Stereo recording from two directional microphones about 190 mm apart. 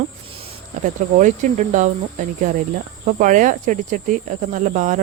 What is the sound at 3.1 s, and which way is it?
Speech, 40° right (ahead or behind).